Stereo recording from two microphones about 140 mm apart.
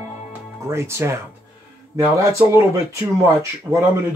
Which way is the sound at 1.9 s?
20° right (ahead or behind).